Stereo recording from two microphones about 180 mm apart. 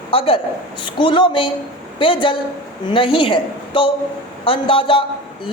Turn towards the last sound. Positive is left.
turn(degrees=30)  # may be behind; listen again after turning